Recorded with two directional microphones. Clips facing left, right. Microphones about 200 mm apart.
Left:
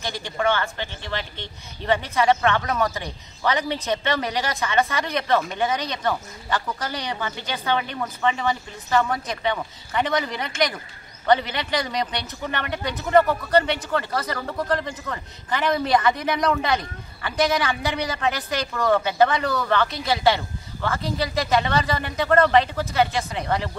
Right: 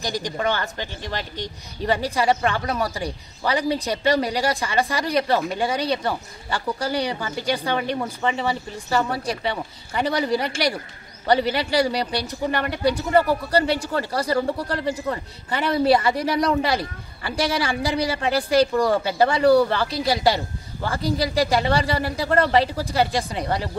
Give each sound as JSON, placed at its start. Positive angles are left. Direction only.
{"t": 0.0, "sound": "speech", "side_deg": -40}